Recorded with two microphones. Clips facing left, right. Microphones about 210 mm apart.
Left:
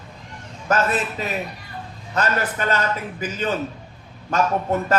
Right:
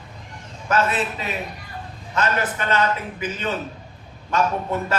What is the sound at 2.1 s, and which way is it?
Speech, 40° left (ahead or behind).